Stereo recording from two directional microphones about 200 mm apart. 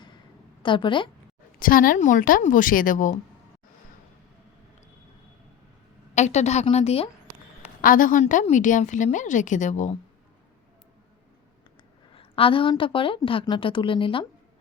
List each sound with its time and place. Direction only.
0.6 s a woman's voice: 25° left (ahead or behind)
1.5 s a woman's voice: 45° left (ahead or behind)
6.1 s a woman's voice: 35° left (ahead or behind)
7.8 s a woman's voice: 45° left (ahead or behind)
12.1 s a woman's voice: 25° left (ahead or behind)